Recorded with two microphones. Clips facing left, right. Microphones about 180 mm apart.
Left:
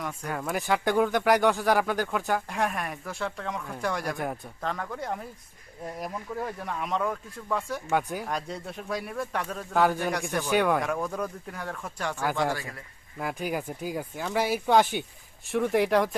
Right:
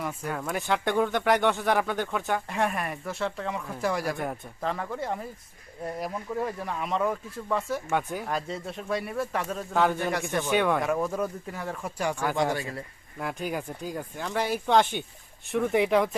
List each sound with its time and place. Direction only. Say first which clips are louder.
0.0 s speech: right 1 dB; 5° right (ahead or behind)
13.1 s speech: left 1 dB; 5° left (ahead or behind)